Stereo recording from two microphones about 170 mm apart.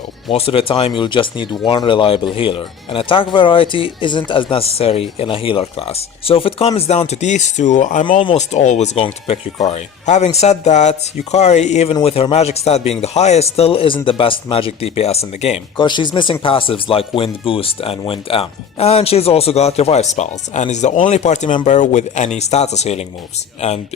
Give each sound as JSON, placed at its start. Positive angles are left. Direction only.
{"t": 0.3, "sound": "speech", "side_deg": 35}
{"t": 8.2, "sound": "speech", "side_deg": 30}
{"t": 8.5, "sound": "speech", "side_deg": 45}
{"t": 15.8, "sound": "speech", "side_deg": 25}